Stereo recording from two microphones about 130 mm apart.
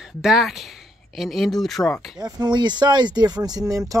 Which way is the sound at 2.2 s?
30° right (ahead or behind).